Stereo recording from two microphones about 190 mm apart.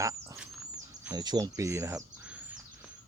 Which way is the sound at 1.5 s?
15° right (ahead or behind).